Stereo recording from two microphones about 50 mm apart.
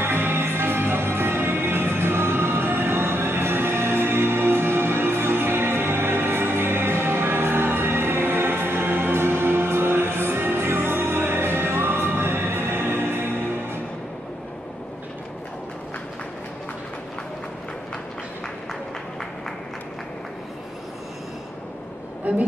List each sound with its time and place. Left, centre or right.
0.0 s music: right